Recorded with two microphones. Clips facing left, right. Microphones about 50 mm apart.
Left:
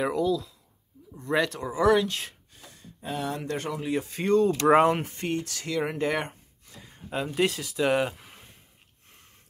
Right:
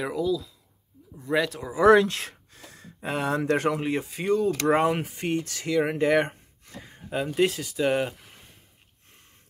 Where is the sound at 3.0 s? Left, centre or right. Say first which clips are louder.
Right 5 dB; right.